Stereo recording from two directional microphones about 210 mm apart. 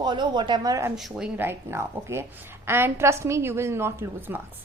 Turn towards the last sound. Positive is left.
turn(degrees=-10)  # may be behind; listen again after turning